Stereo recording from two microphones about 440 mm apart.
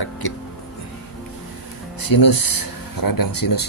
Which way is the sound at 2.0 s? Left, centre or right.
Left.